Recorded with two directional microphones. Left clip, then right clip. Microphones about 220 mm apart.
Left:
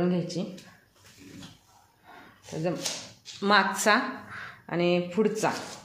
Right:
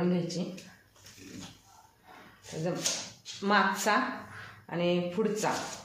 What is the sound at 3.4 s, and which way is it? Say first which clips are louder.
A woman's voice: left 4 dB; 45° left (ahead or behind).